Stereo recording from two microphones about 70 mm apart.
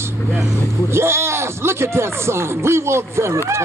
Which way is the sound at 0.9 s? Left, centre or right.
Right.